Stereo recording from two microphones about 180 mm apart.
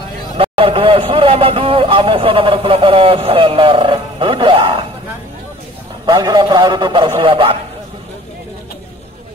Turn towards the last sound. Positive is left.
turn(degrees=-30)  # may be behind; listen again after turning